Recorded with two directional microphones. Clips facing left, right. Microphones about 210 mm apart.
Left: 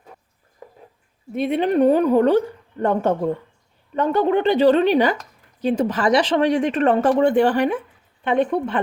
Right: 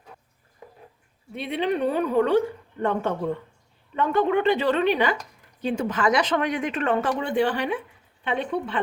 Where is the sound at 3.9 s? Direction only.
35° left (ahead or behind).